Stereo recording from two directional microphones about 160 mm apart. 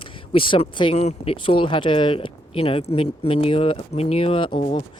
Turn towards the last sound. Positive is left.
turn(degrees=40)  # may be behind; listen again after turning